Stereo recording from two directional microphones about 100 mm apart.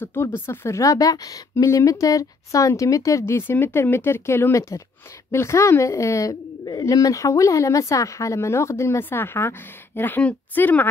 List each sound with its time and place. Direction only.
0.0 s speech: 25° left (ahead or behind)